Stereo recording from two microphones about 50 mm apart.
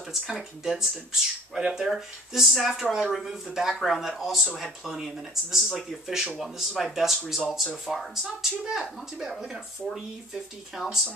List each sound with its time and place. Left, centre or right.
0.1 s speech: centre